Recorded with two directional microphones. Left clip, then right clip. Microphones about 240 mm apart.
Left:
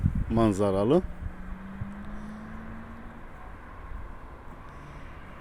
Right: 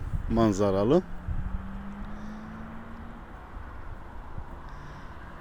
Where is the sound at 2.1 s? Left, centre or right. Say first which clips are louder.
Even; centre.